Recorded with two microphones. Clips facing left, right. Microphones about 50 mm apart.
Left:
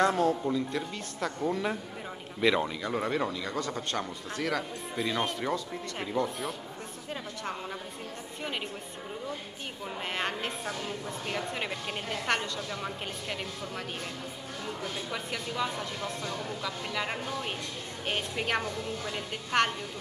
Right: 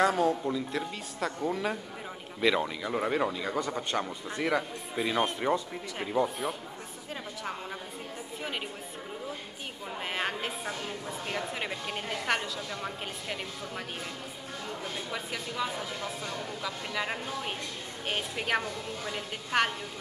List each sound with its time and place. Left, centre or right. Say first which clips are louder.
0.0 s speech: even; centre
0.4 s a woman's voice: left 1 dB; centre
5.2 s speech: right 3 dB; right
10.0 s a woman's voice: even; centre
15.0 s a woman's voice: left 1 dB; centre